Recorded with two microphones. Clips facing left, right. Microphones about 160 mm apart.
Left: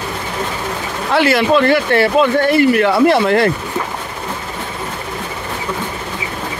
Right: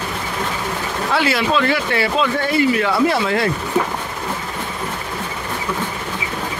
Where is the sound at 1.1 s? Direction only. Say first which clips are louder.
Left 6 dB; 60° left (ahead or behind).